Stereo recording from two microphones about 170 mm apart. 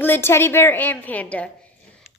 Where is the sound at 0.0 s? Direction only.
10° left (ahead or behind).